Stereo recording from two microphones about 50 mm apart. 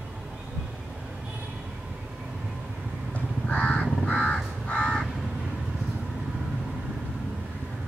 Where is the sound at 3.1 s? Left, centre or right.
Left.